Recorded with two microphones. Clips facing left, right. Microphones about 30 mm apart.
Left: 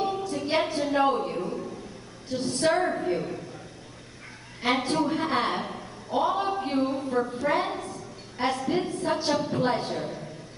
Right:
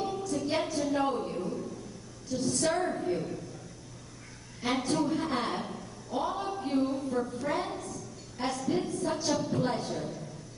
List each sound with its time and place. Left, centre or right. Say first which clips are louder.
0.0 s music: left 4 dB; left
2.2 s a woman's voice: left 4 dB; left
4.6 s a woman's voice: left 4 dB; left